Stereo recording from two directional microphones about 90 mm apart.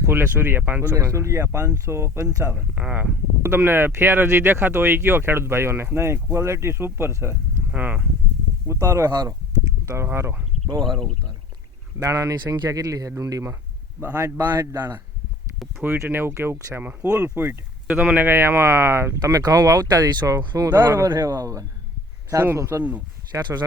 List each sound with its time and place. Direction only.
0.0 s speech: 25° right (ahead or behind)
8.6 s speech: 35° right (ahead or behind)
9.8 s speech: 30° right (ahead or behind)
10.7 s speech: 55° right (ahead or behind)
11.9 s speech: 40° right (ahead or behind)
19.2 s speech: 45° right (ahead or behind)
20.7 s speech: 25° right (ahead or behind)
22.8 s speech: 15° right (ahead or behind)
23.3 s speech: 30° right (ahead or behind)